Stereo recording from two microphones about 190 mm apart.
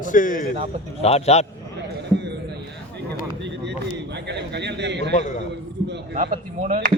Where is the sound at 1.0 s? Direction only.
35° left (ahead or behind).